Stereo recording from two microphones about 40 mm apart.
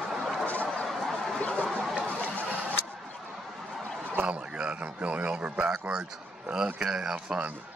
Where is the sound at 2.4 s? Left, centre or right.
Left.